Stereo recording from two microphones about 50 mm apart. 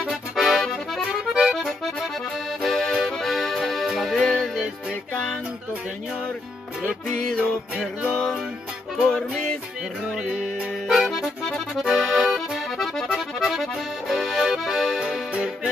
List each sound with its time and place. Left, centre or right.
0.4 s accordion: centre
7.1 s music: centre
8.9 s music: centre
10.9 s accordion: centre
11.8 s accordion: centre
14.6 s music: centre